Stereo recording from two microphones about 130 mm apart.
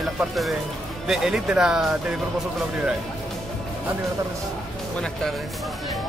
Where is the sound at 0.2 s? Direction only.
Centre (ahead or behind).